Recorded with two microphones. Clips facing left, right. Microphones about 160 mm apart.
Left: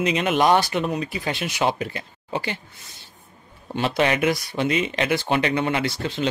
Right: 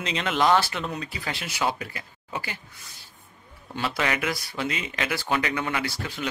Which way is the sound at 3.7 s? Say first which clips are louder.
Left 6 dB; 20° left (ahead or behind).